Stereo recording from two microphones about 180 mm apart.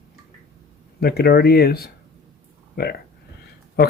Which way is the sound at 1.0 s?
60° left (ahead or behind).